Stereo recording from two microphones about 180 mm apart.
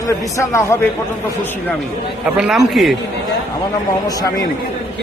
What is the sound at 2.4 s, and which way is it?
Speech, centre (ahead or behind).